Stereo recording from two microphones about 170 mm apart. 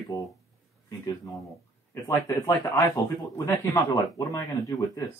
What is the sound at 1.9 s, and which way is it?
Speech, 15° left (ahead or behind).